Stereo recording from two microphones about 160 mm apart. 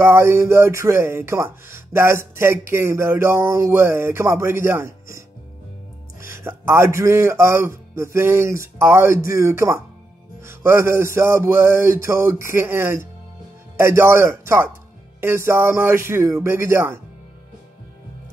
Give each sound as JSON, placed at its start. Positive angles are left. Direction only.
{"t": 0.0, "sound": "speech", "side_deg": -15}
{"t": 6.2, "sound": "speech", "side_deg": -15}